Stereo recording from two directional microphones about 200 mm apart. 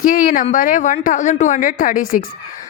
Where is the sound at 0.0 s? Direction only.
45° left (ahead or behind).